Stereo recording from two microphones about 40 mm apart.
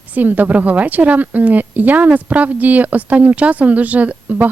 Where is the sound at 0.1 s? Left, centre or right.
Right.